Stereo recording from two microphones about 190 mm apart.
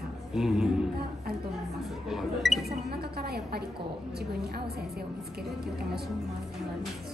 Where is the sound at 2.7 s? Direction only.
55° right (ahead or behind).